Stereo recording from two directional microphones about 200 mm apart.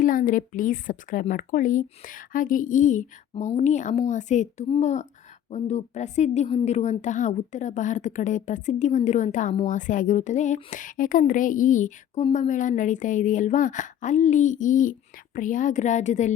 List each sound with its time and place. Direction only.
0.0 s a woman's voice: 45° left (ahead or behind)